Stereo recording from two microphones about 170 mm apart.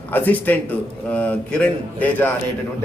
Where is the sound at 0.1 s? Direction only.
10° left (ahead or behind).